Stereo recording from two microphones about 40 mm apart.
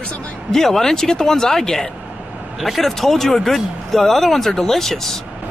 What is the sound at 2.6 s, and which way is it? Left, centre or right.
Speech, centre.